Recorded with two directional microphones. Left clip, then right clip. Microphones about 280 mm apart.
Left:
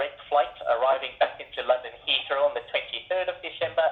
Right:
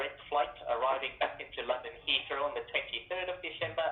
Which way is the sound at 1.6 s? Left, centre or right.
Left.